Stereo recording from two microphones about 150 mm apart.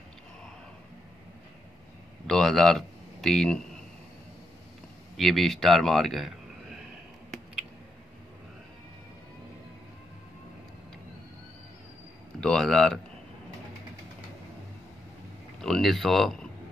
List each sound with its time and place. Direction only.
2.2 s speech: 5° left (ahead or behind)
5.1 s speech: centre (ahead or behind)
12.4 s speech: 5° left (ahead or behind)
15.6 s speech: centre (ahead or behind)